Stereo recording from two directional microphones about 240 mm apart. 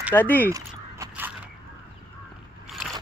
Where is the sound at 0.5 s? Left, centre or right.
Centre.